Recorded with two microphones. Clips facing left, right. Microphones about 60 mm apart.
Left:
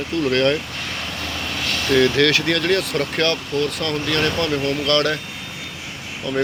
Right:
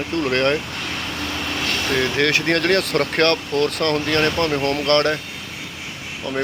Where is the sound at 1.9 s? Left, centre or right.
Centre.